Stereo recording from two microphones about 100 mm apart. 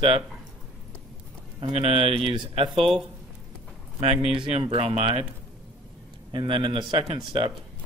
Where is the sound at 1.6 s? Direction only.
70° right (ahead or behind).